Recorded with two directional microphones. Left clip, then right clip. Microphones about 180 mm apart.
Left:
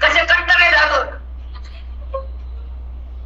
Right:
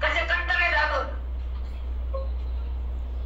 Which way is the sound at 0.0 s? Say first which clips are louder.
Left 11 dB; 45° left (ahead or behind).